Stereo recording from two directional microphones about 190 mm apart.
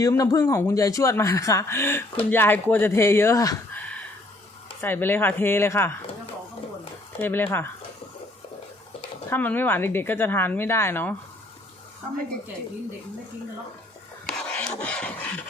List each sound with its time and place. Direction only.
0.0 s a man's voice: 15° left (ahead or behind)
7.2 s a man's voice: 10° left (ahead or behind)
9.3 s a man's voice: 10° left (ahead or behind)
14.3 s a sound: 5° left (ahead or behind)